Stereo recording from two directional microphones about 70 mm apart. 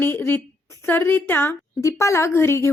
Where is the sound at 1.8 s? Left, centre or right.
Left.